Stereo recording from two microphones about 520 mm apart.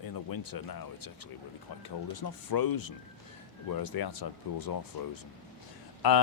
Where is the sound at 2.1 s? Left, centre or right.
Left.